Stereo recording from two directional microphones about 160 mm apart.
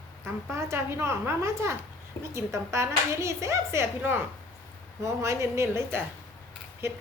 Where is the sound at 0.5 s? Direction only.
15° right (ahead or behind).